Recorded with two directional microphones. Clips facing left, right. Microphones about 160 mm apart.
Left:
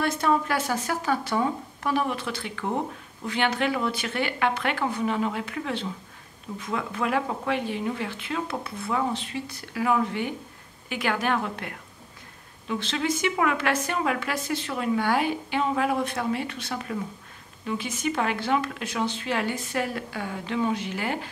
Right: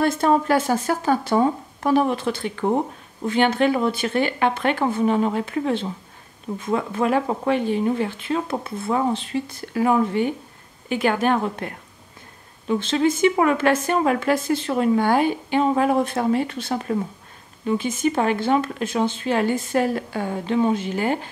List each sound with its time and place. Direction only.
0.1 s a woman's voice: 30° right (ahead or behind)
13.2 s speech: 30° right (ahead or behind)
19.0 s speech: 45° right (ahead or behind)